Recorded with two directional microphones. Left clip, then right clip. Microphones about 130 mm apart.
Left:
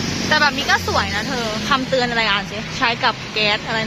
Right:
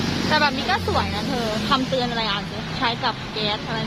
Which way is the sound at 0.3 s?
20° left (ahead or behind).